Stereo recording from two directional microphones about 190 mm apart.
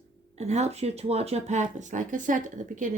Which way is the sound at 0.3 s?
35° right (ahead or behind).